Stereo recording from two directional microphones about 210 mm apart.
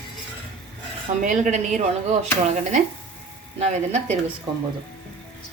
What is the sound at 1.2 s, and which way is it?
Speech, 35° right (ahead or behind).